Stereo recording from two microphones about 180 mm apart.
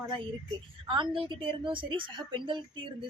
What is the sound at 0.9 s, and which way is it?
A woman's voice, 30° right (ahead or behind).